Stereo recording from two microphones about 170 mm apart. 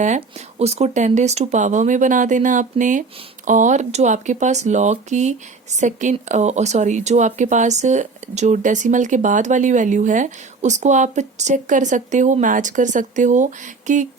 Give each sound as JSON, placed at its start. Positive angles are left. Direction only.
{"t": 0.6, "sound": "speech", "side_deg": -40}